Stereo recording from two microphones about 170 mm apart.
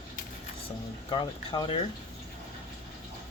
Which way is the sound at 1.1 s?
25° left (ahead or behind).